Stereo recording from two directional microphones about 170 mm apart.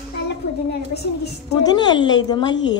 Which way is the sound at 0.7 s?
75° left (ahead or behind).